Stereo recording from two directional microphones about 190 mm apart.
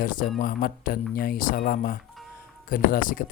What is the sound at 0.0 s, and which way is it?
Speech, 45° left (ahead or behind).